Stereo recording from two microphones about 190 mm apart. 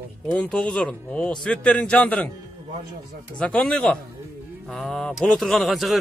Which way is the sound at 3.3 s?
5° left (ahead or behind).